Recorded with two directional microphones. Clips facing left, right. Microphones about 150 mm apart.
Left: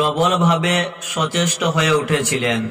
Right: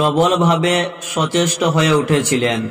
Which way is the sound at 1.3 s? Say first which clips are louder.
Right 5 dB; 30° right (ahead or behind).